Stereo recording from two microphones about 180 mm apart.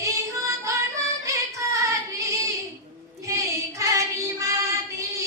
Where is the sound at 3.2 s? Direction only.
15° right (ahead or behind).